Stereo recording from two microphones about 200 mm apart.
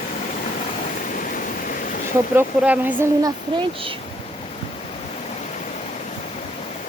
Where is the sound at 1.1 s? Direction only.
45° left (ahead or behind).